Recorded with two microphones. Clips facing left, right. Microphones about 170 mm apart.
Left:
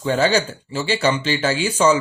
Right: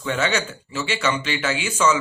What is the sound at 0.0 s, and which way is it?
Speech, 35° left (ahead or behind).